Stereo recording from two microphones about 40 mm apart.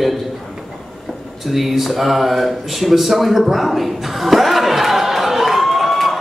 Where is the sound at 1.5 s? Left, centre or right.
Centre.